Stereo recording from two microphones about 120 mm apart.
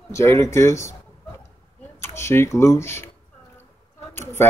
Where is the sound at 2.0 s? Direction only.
20° left (ahead or behind).